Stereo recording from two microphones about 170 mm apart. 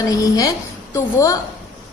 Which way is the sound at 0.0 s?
20° left (ahead or behind).